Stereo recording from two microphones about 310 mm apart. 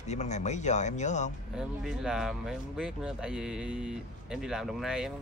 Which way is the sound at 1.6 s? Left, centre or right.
Centre.